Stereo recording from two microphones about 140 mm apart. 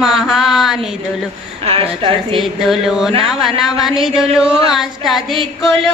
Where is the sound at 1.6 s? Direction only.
45° right (ahead or behind).